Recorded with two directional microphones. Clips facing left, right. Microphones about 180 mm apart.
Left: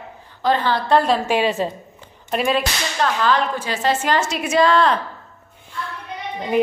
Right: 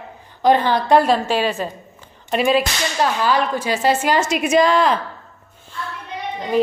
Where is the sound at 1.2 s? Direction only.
20° left (ahead or behind).